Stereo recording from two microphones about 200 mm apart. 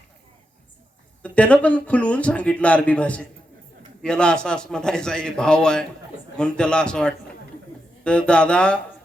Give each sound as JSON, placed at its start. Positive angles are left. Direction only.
{"t": 1.2, "sound": "a man's voice", "side_deg": 5}